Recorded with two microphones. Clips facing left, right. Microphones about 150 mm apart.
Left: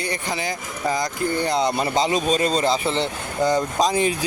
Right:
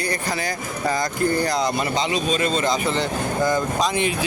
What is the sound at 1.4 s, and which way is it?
Speech, 30° left (ahead or behind).